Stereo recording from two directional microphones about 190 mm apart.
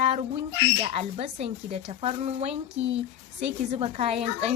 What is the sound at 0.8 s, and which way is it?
Speech, 30° right (ahead or behind).